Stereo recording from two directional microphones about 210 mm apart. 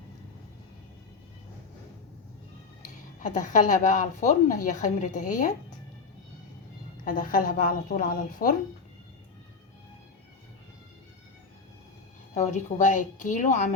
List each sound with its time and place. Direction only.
2.8 s speech: 35° left (ahead or behind)
7.0 s speech: 40° left (ahead or behind)
12.3 s speech: 35° left (ahead or behind)